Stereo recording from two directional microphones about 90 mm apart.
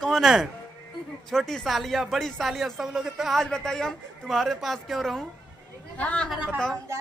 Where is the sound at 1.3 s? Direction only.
5° left (ahead or behind).